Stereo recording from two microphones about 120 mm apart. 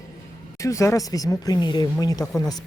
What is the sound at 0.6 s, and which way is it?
Speech, 25° left (ahead or behind).